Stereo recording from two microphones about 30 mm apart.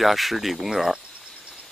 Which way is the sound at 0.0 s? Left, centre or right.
Centre.